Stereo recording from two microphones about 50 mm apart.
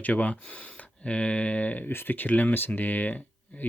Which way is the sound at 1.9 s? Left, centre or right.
Left.